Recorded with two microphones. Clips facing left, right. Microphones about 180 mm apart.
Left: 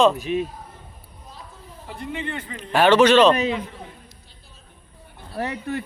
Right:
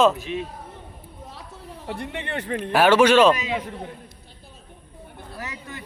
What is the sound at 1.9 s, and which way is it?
Speech, 65° right (ahead or behind).